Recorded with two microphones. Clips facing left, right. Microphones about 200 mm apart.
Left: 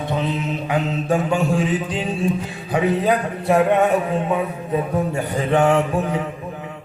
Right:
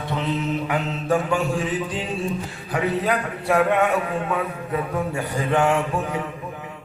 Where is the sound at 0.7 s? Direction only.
20° left (ahead or behind).